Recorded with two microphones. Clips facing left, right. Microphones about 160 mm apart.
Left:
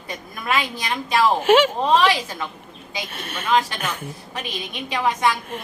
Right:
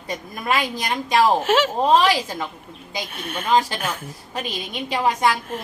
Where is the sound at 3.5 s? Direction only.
35° right (ahead or behind).